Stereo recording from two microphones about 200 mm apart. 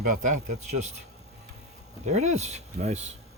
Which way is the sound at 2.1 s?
35° right (ahead or behind).